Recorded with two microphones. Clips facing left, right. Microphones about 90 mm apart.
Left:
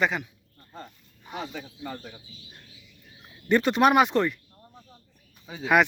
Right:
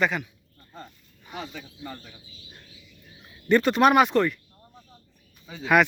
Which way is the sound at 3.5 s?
20° left (ahead or behind).